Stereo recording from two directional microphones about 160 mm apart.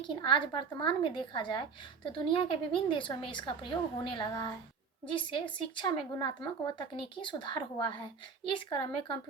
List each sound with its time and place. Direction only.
0.0 s a woman's voice: 30° left (ahead or behind)